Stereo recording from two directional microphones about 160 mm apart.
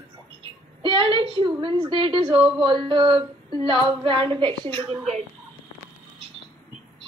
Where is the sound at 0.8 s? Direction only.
35° right (ahead or behind).